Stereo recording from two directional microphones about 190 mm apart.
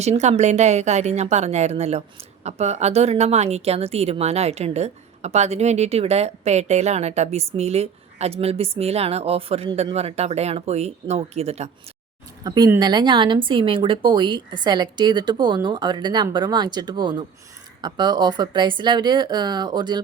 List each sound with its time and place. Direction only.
0.0 s a woman's voice: 35° right (ahead or behind)
12.4 s a woman's voice: 20° right (ahead or behind)